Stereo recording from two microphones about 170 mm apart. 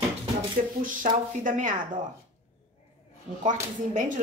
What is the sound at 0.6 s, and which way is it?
Speech, 50° right (ahead or behind).